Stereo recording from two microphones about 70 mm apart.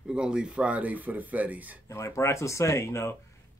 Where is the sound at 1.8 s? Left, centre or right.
Left.